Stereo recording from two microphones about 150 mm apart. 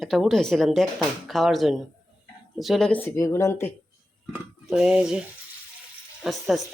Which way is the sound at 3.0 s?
20° left (ahead or behind).